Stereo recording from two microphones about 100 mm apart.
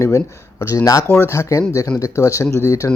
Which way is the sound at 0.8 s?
35° left (ahead or behind).